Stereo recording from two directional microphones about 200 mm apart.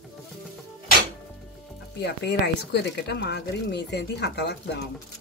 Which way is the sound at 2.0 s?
55° left (ahead or behind).